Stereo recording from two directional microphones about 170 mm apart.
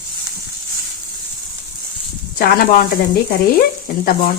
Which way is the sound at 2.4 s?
55° left (ahead or behind).